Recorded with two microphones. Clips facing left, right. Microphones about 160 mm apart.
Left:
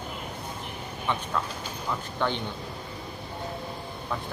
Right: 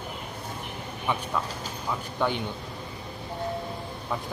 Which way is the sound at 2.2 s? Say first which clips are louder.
Right 1 dB; 10° right (ahead or behind).